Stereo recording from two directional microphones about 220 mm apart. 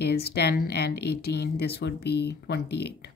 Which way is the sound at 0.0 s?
45° left (ahead or behind).